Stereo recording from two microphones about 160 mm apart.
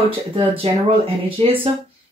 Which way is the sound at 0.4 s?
35° right (ahead or behind).